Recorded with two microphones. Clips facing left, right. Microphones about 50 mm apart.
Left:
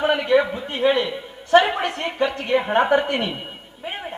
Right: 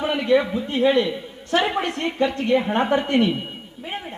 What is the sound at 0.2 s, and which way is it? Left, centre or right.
A man's voice, centre.